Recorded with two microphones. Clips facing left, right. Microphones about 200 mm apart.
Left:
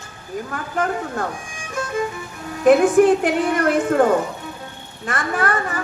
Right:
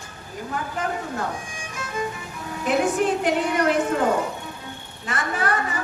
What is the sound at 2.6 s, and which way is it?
A woman's voice, 50° left (ahead or behind).